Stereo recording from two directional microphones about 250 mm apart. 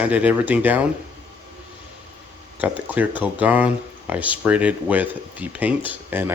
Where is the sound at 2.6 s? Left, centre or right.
Centre.